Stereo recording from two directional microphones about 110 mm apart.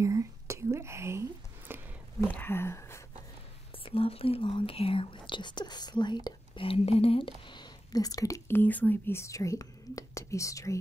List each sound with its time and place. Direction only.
0.0 s whispering: 30° right (ahead or behind)
1.7 s a sound: 20° right (ahead or behind)
2.1 s speech: 20° left (ahead or behind)
3.8 s speech: 60° left (ahead or behind); by 6.1 s 40° left (ahead or behind)
6.2 s speech: 55° left (ahead or behind); by 8.4 s 35° left (ahead or behind)
8.5 s speech: 15° left (ahead or behind)